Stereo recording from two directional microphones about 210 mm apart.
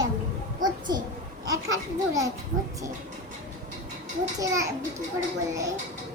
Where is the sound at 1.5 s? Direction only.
15° right (ahead or behind).